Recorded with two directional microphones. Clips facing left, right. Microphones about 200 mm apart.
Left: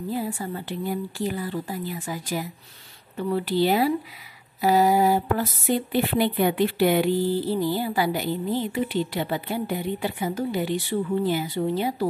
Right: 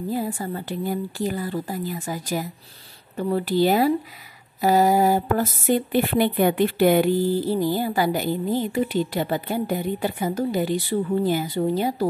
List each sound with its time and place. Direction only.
0.1 s speech: 45° right (ahead or behind)